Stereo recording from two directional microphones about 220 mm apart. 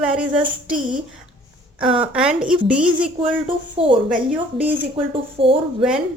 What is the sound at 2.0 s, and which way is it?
Speech, 5° right (ahead or behind).